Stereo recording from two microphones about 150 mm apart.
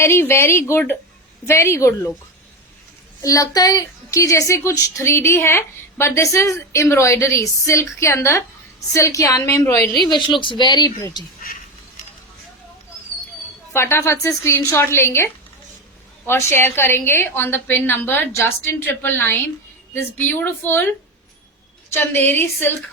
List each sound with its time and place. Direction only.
0.0 s a woman's voice: 15° left (ahead or behind)
3.2 s a woman's voice: 20° left (ahead or behind)
10.1 s a woman's voice: 35° left (ahead or behind)
13.7 s a woman's voice: 20° left (ahead or behind)
21.9 s a woman's voice: 15° left (ahead or behind)